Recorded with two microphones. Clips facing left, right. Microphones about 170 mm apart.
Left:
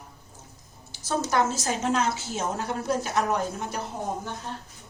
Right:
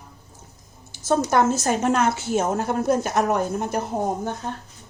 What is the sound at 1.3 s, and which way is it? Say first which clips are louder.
A woman's voice: right 3 dB; 50° right (ahead or behind).